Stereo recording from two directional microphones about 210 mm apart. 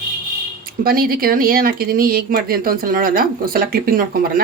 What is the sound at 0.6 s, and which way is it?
Speech, 45° right (ahead or behind).